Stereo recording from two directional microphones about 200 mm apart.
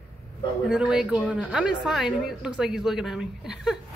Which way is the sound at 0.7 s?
5° right (ahead or behind).